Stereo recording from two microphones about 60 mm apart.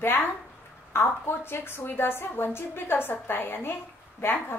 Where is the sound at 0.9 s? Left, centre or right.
Left.